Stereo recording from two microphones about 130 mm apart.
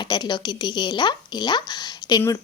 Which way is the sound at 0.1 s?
35° left (ahead or behind).